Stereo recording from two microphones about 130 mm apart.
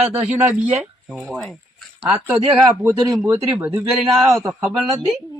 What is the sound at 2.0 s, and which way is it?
A man's voice, 10° right (ahead or behind).